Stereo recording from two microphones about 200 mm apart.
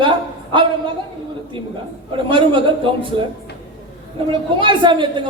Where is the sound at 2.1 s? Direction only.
25° right (ahead or behind).